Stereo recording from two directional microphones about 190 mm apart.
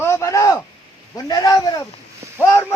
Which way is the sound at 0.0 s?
15° left (ahead or behind).